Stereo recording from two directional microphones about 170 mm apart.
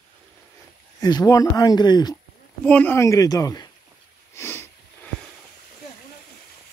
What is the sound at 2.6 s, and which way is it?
Speech, 10° left (ahead or behind).